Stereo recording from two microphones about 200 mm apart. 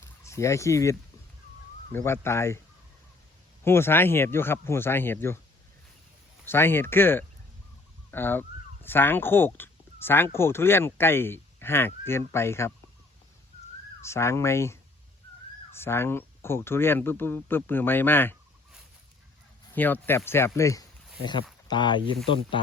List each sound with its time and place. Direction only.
0.0 s speech: 15° left (ahead or behind)
3.6 s speech: 10° left (ahead or behind)
6.4 s speech: 10° left (ahead or behind)
14.0 s speech: 15° left (ahead or behind)
19.7 s speech: 10° left (ahead or behind); by 22.6 s 25° left (ahead or behind)